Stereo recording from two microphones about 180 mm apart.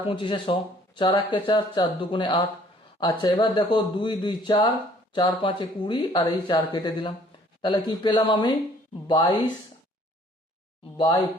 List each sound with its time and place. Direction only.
0.0 s speech: 30° left (ahead or behind)
10.9 s speech: 25° left (ahead or behind)